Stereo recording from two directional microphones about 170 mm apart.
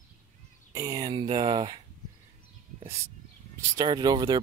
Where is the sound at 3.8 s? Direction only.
25° right (ahead or behind).